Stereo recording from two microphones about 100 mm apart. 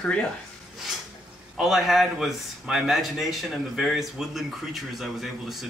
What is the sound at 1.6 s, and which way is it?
Speech, centre (ahead or behind).